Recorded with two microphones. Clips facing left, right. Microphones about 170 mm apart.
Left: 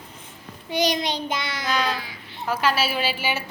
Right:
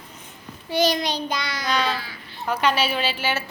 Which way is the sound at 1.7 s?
Centre (ahead or behind).